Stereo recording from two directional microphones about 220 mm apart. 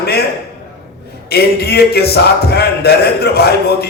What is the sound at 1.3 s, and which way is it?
A man's voice, 45° left (ahead or behind).